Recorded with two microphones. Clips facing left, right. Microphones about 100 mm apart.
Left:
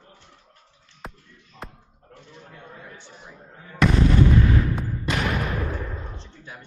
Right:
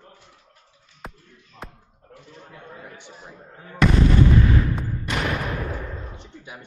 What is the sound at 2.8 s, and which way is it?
Speech, 15° right (ahead or behind).